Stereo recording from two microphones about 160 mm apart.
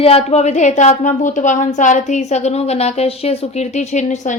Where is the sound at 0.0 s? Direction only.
40° left (ahead or behind).